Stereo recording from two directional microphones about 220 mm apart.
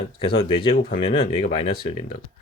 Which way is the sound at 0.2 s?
25° left (ahead or behind).